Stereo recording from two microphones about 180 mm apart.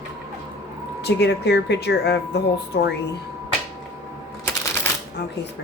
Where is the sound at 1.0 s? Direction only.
70° left (ahead or behind).